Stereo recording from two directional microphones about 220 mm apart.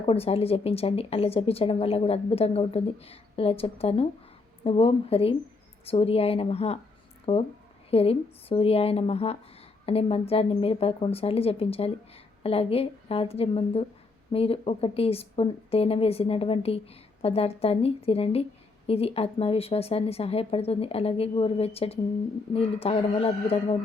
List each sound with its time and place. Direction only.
0.0 s a woman's voice: 25° left (ahead or behind)